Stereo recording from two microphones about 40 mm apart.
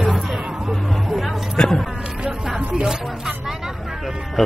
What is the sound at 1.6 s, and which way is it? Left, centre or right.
Speech, centre.